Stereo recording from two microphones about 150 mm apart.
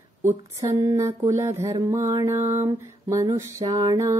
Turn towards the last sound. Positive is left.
turn(degrees=-20)  # may be behind; listen again after turning